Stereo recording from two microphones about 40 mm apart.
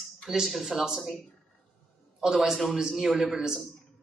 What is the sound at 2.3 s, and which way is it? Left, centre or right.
Speech, centre.